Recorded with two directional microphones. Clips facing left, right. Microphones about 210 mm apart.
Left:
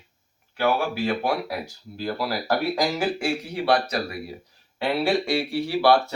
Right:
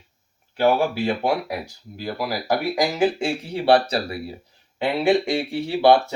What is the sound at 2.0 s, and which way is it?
Speech, 15° right (ahead or behind).